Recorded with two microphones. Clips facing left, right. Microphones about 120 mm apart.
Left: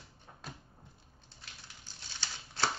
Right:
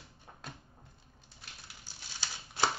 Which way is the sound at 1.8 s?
15° right (ahead or behind).